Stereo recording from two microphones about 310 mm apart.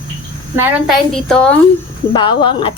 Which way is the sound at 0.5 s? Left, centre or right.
Centre.